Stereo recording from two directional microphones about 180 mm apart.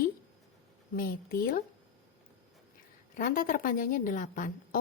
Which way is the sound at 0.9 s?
55° left (ahead or behind).